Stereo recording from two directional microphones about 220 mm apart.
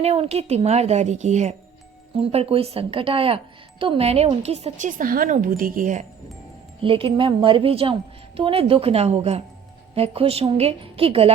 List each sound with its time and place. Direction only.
0.0 s speech: 30° right (ahead or behind)
6.8 s speech: 25° right (ahead or behind)